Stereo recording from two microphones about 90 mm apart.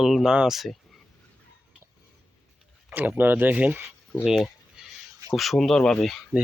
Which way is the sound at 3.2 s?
20° right (ahead or behind).